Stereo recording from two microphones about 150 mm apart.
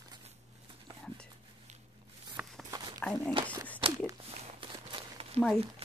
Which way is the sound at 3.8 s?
35° right (ahead or behind).